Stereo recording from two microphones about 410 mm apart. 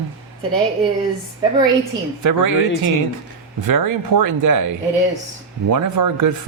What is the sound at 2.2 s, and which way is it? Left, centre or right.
Speech, right.